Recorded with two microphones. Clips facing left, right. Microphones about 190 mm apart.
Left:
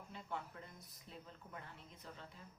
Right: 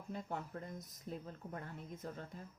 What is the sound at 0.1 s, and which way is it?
Speech, 45° right (ahead or behind).